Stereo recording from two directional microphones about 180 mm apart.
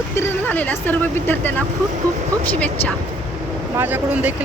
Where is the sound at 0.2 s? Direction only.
10° left (ahead or behind).